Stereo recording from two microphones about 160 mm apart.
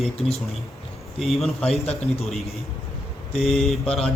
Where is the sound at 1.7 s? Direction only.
40° left (ahead or behind).